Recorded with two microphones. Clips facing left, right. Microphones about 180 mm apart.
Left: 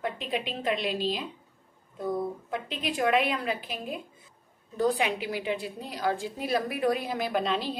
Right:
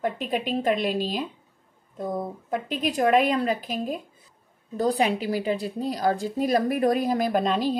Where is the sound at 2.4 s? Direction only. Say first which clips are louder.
Right 6 dB; 45° right (ahead or behind).